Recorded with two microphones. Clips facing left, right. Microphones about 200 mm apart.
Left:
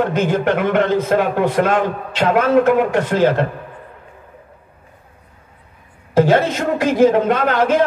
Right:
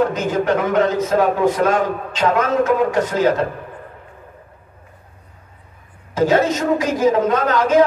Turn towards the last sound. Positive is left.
turn(degrees=60)  # may be behind; listen again after turning